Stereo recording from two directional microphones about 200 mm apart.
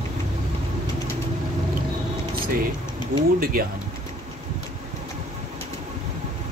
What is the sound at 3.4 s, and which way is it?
Speech, 45° right (ahead or behind).